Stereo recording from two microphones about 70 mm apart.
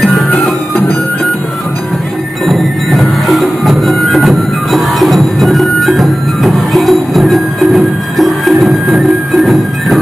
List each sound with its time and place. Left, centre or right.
0.3 s music: left
2.4 s music: centre